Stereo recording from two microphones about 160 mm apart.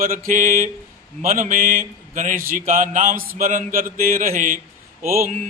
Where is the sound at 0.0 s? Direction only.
55° right (ahead or behind).